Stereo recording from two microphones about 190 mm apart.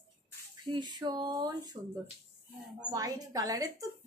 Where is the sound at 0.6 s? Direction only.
25° right (ahead or behind).